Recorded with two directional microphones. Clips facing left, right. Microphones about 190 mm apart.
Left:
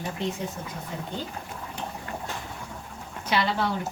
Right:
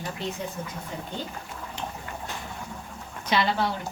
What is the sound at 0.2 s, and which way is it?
Speech, 20° left (ahead or behind).